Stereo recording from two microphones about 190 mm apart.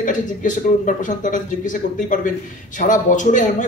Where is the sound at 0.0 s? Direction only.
45° left (ahead or behind).